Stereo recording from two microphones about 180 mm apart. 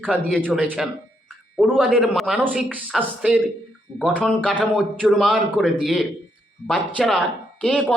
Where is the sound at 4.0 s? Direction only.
5° left (ahead or behind).